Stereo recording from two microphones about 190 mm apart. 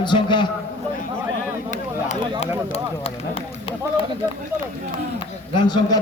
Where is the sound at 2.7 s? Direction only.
30° left (ahead or behind).